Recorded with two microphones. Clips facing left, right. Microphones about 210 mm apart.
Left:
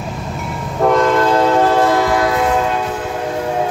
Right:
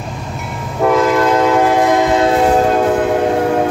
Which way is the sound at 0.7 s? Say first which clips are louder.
Right 1 dB; 5° right (ahead or behind).